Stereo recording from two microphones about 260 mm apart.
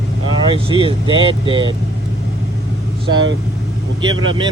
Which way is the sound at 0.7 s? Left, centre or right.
Centre.